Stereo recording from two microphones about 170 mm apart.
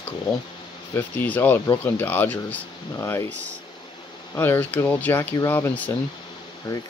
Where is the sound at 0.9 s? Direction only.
10° left (ahead or behind).